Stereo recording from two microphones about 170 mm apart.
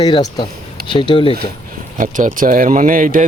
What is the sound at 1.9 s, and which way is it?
Speech, 50° right (ahead or behind).